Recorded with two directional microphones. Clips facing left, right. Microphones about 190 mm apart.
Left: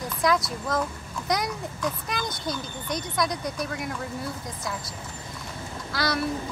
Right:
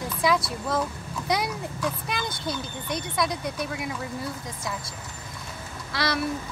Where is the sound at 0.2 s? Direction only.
5° right (ahead or behind).